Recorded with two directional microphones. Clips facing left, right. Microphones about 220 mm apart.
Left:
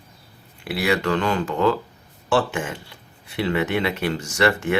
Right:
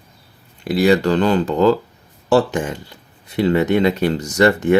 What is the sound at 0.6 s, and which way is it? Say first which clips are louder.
Speech: right 7 dB; 35° right (ahead or behind).